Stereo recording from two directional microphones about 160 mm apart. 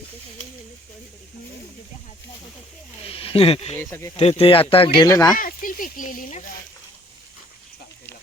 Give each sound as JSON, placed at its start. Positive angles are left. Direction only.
{"t": 3.1, "sound": "speech", "side_deg": 35}
{"t": 3.8, "sound": "speech", "side_deg": 15}
{"t": 4.2, "sound": "speech", "side_deg": 40}
{"t": 4.9, "sound": "speech", "side_deg": 20}
{"t": 5.4, "sound": "a sound", "side_deg": 60}